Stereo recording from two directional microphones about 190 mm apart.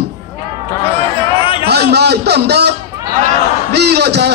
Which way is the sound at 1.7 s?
60° right (ahead or behind).